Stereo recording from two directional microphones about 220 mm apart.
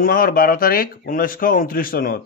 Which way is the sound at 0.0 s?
40° left (ahead or behind).